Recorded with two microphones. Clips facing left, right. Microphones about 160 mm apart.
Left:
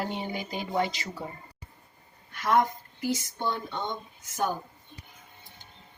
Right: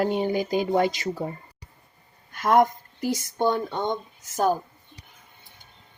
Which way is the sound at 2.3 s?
50° right (ahead or behind).